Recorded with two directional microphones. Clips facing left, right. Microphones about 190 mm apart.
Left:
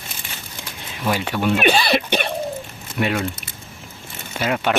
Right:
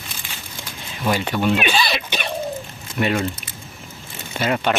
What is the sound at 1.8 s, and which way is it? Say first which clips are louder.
Throat clearing: left 4 dB; 55° left (ahead or behind).